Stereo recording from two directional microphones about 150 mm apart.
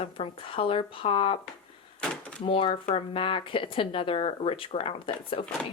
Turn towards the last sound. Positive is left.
turn(degrees=35)  # may be behind; listen again after turning